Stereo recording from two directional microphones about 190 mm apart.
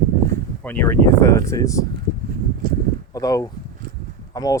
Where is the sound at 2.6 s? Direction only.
50° right (ahead or behind).